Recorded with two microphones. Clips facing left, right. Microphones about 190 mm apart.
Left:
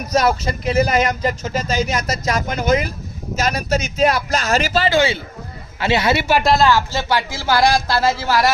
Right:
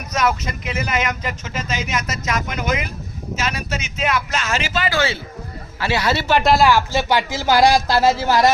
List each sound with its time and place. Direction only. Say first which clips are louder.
0.1 s speech: left 3 dB; 35° left (ahead or behind)
4.9 s a man's voice: left 4 dB; 15° left (ahead or behind)
6.4 s speech: even; 5° right (ahead or behind)